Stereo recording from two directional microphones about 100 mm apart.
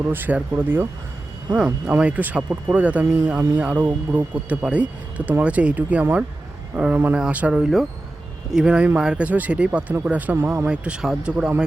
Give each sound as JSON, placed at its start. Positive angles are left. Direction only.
{"t": 0.0, "sound": "speech", "side_deg": -20}
{"t": 10.7, "sound": "speech", "side_deg": -10}